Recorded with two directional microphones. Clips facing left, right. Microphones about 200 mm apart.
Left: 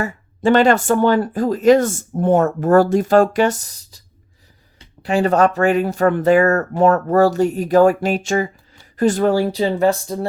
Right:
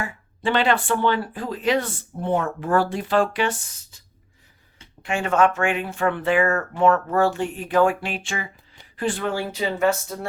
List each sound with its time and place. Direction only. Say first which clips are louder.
0.0 s speech: left 8 dB; 45° left (ahead or behind)
5.0 s speech: left 5 dB; 35° left (ahead or behind)